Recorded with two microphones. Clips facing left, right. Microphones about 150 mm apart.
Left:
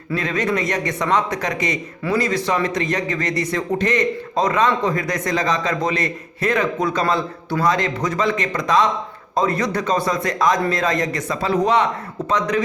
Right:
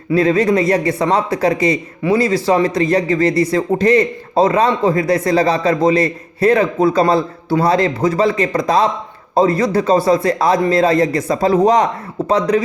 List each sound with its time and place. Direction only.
0.1 s a man's voice: 35° right (ahead or behind)